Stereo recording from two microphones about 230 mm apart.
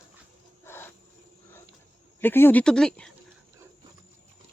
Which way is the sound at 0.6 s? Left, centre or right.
Centre.